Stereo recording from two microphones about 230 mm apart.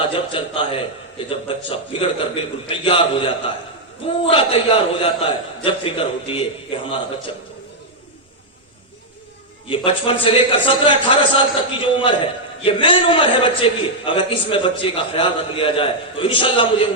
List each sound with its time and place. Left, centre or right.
0.1 s a man's voice: left
9.6 s a man's voice: left